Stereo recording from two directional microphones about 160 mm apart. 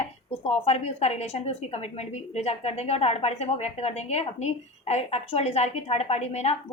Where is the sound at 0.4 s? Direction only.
40° left (ahead or behind).